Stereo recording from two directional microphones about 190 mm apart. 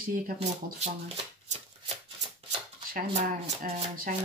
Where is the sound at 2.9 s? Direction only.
45° right (ahead or behind).